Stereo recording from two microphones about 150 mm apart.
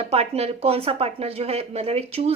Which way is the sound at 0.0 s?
45° right (ahead or behind).